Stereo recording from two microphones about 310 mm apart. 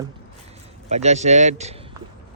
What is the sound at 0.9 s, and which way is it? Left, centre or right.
Speech, right.